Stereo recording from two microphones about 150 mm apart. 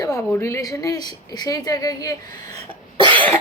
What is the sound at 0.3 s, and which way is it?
Speech, 15° left (ahead or behind).